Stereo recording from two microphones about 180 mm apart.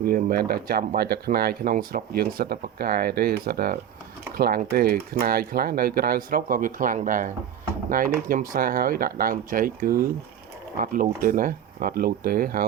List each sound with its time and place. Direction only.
0.0 s speech: 55° right (ahead or behind)